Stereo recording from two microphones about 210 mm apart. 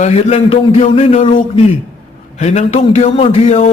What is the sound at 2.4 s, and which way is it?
Speech, 30° left (ahead or behind).